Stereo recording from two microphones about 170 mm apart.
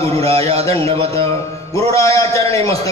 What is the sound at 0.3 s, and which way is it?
Speech, 35° right (ahead or behind).